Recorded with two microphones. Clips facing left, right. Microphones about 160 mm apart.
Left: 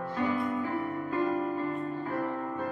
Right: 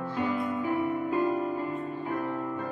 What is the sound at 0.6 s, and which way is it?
Music, 15° right (ahead or behind).